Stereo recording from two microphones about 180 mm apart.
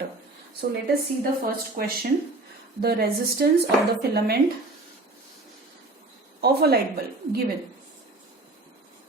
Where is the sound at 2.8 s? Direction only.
60° right (ahead or behind).